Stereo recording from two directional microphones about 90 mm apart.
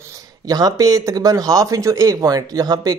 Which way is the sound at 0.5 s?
45° right (ahead or behind).